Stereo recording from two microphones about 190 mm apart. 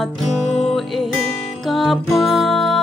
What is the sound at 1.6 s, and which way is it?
Music, centre (ahead or behind).